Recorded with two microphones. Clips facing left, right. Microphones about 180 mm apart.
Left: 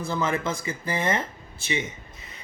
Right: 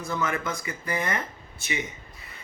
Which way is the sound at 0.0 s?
30° left (ahead or behind).